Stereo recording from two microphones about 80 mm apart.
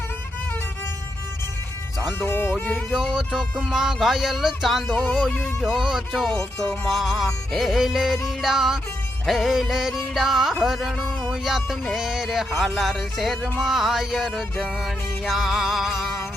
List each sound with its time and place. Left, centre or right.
2.1 s speech: left
2.9 s music: centre